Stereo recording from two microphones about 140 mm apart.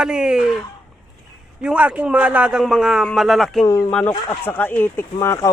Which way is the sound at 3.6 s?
25° left (ahead or behind).